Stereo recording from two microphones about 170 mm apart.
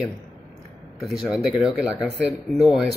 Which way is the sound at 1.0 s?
5° right (ahead or behind).